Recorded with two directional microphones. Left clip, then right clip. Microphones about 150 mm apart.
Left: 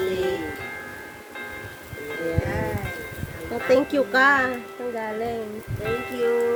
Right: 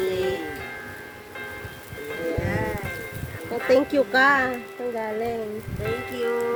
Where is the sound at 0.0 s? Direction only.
40° left (ahead or behind).